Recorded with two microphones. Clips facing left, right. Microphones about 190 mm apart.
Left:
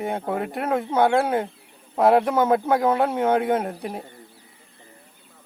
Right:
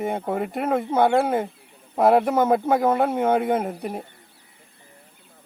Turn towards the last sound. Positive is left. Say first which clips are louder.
# even
turn(degrees=-5)  # may be behind; listen again after turning